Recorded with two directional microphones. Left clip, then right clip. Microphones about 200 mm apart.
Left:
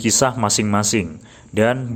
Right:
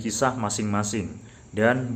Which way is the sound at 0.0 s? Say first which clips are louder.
Left 7 dB; 30° left (ahead or behind).